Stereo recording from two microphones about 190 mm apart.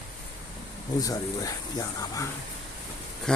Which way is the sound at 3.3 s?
5° left (ahead or behind).